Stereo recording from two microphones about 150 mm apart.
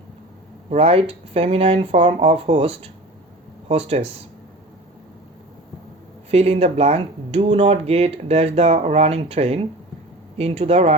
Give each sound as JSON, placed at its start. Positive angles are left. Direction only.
{"t": 0.7, "sound": "speech", "side_deg": -45}
{"t": 6.3, "sound": "speech", "side_deg": -45}